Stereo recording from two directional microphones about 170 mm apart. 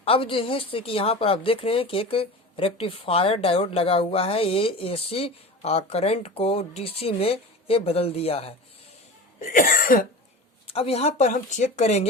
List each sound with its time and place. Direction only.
0.0 s speech: 30° left (ahead or behind)
9.4 s cough: 55° left (ahead or behind)
10.7 s speech: 35° left (ahead or behind)